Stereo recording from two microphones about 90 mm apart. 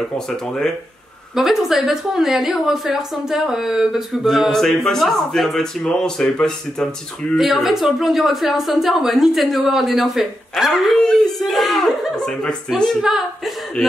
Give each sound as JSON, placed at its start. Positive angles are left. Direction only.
{"t": 1.3, "sound": "a woman's voice", "side_deg": -5}